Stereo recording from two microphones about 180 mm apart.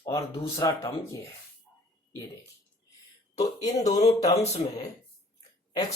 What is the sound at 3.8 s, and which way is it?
Speech, 35° left (ahead or behind).